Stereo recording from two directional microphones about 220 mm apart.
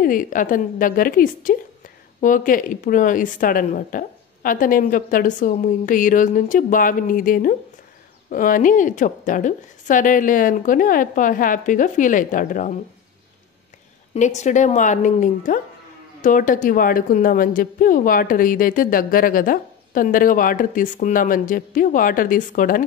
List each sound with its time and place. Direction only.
0.0 s a woman's voice: 40° left (ahead or behind)
14.1 s a woman's voice: 35° left (ahead or behind)